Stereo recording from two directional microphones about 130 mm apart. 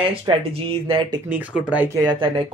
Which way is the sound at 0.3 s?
45° right (ahead or behind).